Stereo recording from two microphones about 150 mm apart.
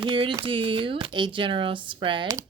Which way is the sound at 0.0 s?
35° right (ahead or behind).